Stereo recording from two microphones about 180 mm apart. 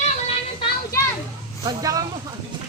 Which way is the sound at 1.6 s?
20° right (ahead or behind).